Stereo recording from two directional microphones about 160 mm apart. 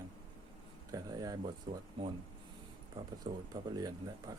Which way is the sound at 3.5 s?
25° right (ahead or behind).